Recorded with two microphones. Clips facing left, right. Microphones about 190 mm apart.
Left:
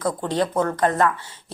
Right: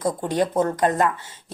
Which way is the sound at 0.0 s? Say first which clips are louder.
Right 1 dB; 15° right (ahead or behind).